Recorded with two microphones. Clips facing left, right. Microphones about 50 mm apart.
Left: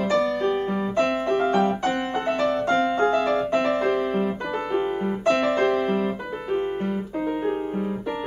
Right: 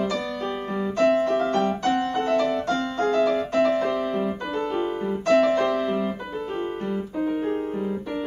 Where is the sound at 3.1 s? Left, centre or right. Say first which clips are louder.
Even; left.